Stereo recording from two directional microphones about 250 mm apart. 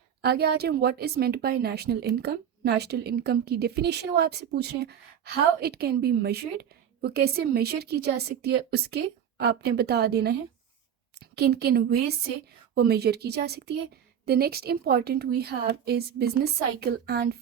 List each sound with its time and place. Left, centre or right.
0.2 s speech: right